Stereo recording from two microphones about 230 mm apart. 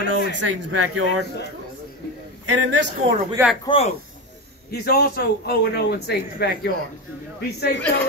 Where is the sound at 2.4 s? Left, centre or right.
Right.